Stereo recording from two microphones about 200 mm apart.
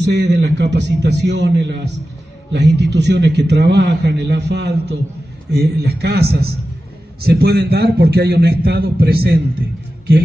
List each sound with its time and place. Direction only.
0.0 s a man's voice: 60° right (ahead or behind)